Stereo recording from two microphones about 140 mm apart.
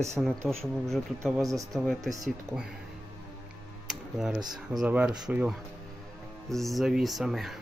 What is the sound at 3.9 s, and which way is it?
Tick-tock, 5° right (ahead or behind).